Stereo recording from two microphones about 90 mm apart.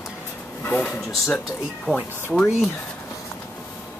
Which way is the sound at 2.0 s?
20° left (ahead or behind).